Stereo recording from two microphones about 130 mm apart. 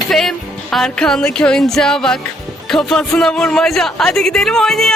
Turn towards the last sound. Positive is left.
turn(degrees=5)  # may be behind; listen again after turning